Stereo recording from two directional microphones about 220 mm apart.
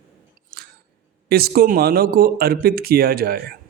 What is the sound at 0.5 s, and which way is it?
Chewing, 45° right (ahead or behind).